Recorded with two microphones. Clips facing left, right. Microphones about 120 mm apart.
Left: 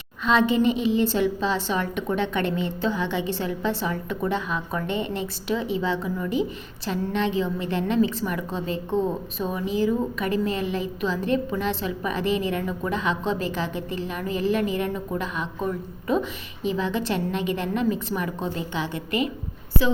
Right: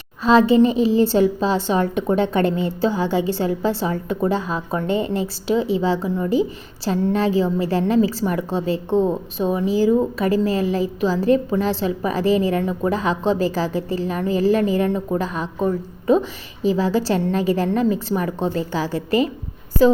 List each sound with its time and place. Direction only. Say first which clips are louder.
0.2 s a woman's voice: right 7 dB; 35° right (ahead or behind)